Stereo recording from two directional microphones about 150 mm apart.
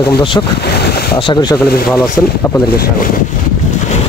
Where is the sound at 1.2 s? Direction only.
30° left (ahead or behind).